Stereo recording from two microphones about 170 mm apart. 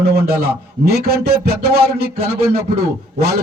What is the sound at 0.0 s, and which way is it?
A man's voice, 65° right (ahead or behind).